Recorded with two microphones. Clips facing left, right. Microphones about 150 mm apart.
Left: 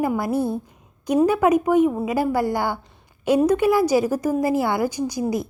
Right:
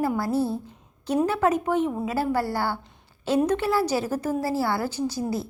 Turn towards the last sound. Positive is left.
turn(degrees=15)  # may be behind; listen again after turning